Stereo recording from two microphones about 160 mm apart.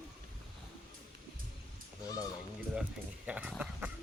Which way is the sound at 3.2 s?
10° right (ahead or behind).